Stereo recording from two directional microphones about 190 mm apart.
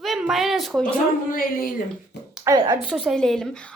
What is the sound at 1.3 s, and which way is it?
Speech, 50° left (ahead or behind).